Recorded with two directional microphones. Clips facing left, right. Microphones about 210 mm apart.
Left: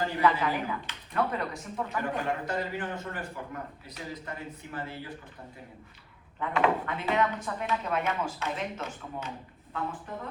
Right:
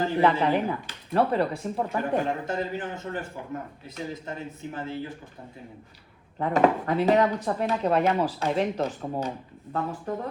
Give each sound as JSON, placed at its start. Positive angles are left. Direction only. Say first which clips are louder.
{"t": 0.2, "sound": "speech", "louder": "right 5 dB", "side_deg": -25}
{"t": 6.4, "sound": "speech", "louder": "right 5 dB", "side_deg": -40}